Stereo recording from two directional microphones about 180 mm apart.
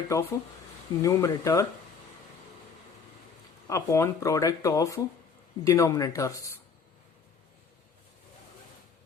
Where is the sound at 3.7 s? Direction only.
15° left (ahead or behind).